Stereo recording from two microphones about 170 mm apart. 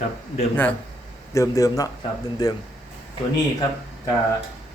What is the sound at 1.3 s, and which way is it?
A man's voice, 20° left (ahead or behind).